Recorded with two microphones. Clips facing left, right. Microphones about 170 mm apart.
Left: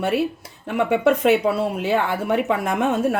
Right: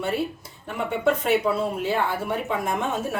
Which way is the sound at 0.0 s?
75° left (ahead or behind).